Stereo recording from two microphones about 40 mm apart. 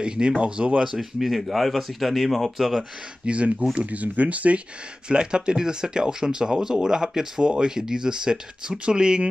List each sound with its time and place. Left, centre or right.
0.0 s speech: right
0.9 s speech: centre
3.3 s speech: right
5.0 s speech: right